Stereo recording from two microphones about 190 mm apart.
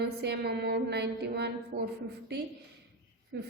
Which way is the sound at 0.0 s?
60° right (ahead or behind).